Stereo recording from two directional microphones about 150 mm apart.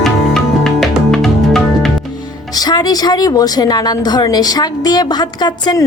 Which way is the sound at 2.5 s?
25° left (ahead or behind).